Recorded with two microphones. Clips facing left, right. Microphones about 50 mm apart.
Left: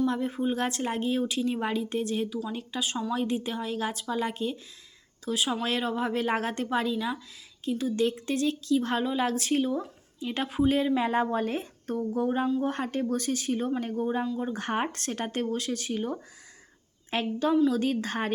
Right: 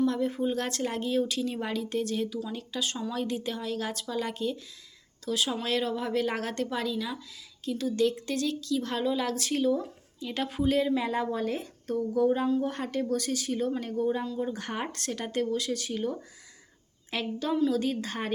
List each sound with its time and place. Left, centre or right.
0.0 s speech: centre; by 18.3 s left